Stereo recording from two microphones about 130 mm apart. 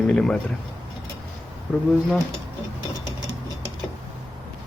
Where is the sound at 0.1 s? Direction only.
5° left (ahead or behind).